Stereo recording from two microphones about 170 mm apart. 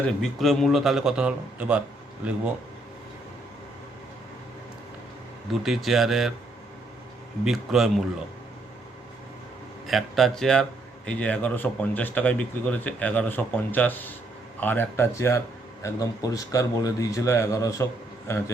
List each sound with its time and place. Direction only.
0.2 s a man's voice: centre (ahead or behind)
5.6 s a man's voice: centre (ahead or behind)
7.4 s a man's voice: centre (ahead or behind)
9.8 s a man's voice: centre (ahead or behind)